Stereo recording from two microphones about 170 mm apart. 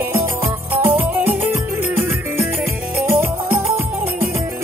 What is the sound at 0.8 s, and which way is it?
Music, 10° right (ahead or behind).